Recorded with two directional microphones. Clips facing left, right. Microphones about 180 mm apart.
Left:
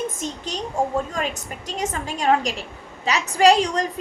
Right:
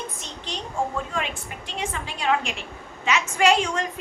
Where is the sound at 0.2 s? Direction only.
45° left (ahead or behind).